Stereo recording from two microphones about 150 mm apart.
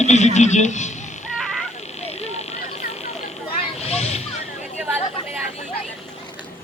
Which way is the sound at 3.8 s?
45° left (ahead or behind).